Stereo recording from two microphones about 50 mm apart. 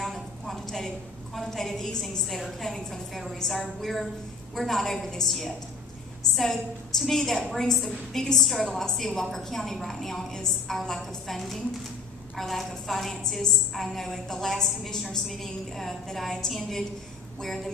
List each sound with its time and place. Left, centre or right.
0.0 s a woman's voice: centre
8.2 s a woman's voice: centre